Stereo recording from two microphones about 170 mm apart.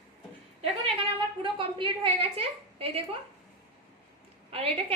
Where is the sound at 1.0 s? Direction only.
30° right (ahead or behind).